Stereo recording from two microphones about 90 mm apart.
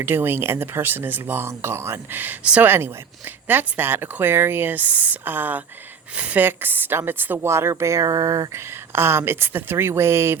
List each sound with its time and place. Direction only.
0.0 s speech: 25° right (ahead or behind)
2.6 s speech: 25° right (ahead or behind)
8.9 s speech: 25° right (ahead or behind)